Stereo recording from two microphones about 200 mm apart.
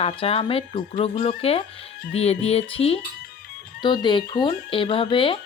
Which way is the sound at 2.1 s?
30° left (ahead or behind).